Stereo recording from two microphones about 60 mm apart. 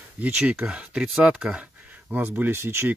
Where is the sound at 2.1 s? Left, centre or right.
Right.